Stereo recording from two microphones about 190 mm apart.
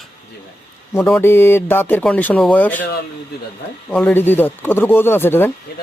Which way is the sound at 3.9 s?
10° left (ahead or behind).